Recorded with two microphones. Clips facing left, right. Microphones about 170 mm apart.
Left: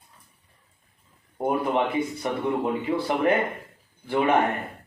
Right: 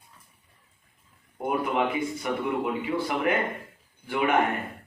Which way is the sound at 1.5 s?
35° left (ahead or behind).